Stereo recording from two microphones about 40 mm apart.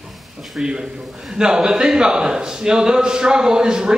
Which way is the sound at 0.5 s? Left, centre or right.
Centre.